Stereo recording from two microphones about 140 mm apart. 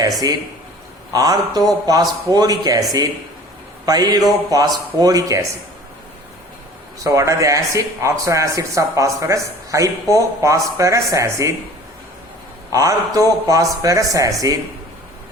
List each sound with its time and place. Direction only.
1.1 s speech: 25° right (ahead or behind)
7.0 s speech: 20° right (ahead or behind)
12.7 s speech: 25° right (ahead or behind)